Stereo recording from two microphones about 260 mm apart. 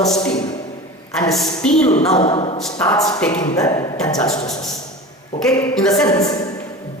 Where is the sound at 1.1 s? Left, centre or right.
Centre.